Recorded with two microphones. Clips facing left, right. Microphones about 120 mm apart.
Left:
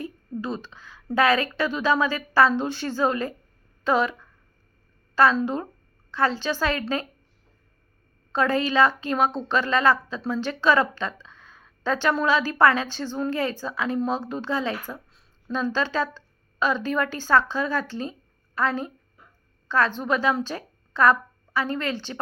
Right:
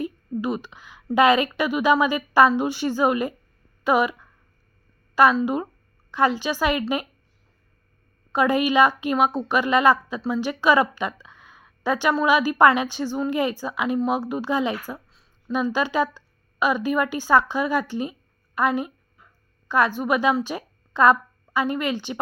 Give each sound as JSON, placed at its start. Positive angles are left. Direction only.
{"t": 0.0, "sound": "a sound", "side_deg": -15}
{"t": 1.1, "sound": "a woman's voice", "side_deg": -15}
{"t": 8.3, "sound": "a woman's voice", "side_deg": -15}